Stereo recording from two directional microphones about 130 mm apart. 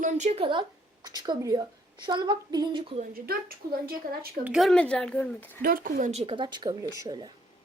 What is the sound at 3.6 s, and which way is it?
Speech, 90° right.